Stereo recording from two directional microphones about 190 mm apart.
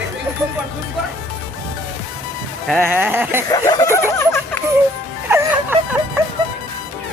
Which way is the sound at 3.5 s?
15° left (ahead or behind).